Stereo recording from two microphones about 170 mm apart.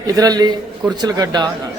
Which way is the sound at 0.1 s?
20° right (ahead or behind).